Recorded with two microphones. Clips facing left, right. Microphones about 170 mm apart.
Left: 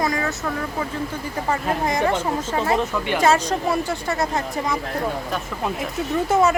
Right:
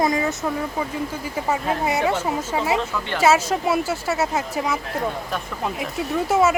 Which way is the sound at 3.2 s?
5° right (ahead or behind).